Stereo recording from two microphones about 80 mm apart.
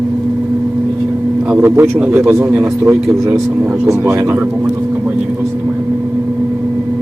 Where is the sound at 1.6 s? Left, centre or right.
Right.